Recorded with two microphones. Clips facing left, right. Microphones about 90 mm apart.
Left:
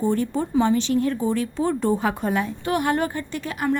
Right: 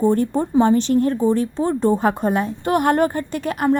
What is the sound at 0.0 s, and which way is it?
Speech, 40° right (ahead or behind).